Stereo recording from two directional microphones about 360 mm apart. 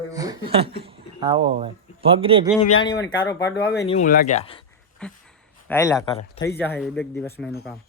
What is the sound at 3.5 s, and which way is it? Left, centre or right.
Speech, left.